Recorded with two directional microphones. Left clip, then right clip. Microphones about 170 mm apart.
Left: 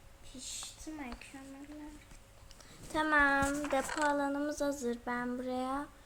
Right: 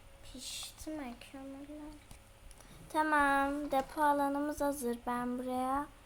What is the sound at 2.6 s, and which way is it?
Speech, 5° left (ahead or behind).